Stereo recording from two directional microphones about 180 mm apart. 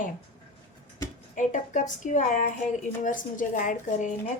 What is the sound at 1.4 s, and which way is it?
A woman's voice, 45° left (ahead or behind).